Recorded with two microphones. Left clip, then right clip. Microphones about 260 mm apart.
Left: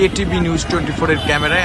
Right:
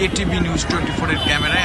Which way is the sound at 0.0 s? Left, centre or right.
Centre.